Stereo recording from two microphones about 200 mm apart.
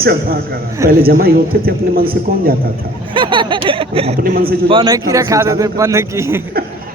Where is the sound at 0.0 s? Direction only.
50° right (ahead or behind).